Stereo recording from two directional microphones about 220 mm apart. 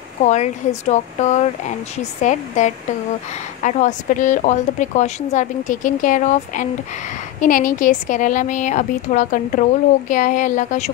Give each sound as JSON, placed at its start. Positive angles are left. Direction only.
{"t": 0.2, "sound": "a woman's voice", "side_deg": 30}